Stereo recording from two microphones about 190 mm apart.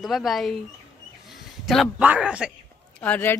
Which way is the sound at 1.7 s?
5° right (ahead or behind).